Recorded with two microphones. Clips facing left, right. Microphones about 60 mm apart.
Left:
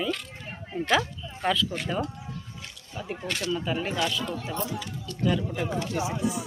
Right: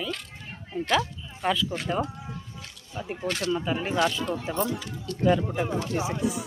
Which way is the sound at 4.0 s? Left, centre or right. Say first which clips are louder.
Right 3 dB; right.